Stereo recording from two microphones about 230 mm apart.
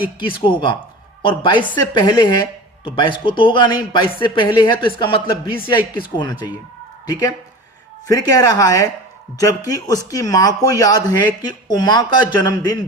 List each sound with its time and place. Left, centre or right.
0.2 s speech: left